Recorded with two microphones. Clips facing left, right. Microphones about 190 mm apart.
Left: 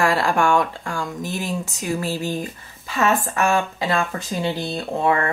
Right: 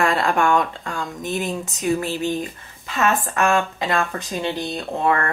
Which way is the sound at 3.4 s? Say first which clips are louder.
Right 2 dB; 20° left (ahead or behind).